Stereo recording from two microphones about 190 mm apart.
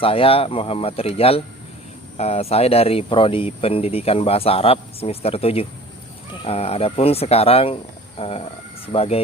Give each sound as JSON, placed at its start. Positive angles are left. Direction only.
{"t": 0.0, "sound": "speech", "side_deg": 30}